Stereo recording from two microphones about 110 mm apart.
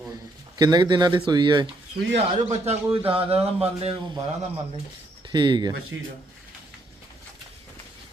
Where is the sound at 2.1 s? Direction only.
70° right (ahead or behind).